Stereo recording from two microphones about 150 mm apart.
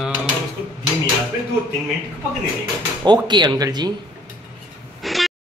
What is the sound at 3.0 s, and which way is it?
Speech, 30° right (ahead or behind).